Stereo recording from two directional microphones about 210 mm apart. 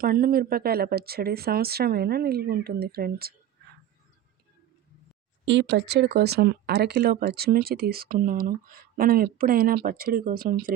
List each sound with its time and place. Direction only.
0.0 s speech: 45° right (ahead or behind)
5.5 s speech: 55° right (ahead or behind)